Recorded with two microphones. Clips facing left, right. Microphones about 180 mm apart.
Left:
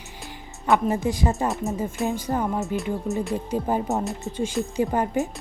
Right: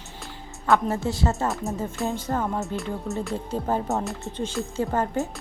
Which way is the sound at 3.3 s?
15° left (ahead or behind).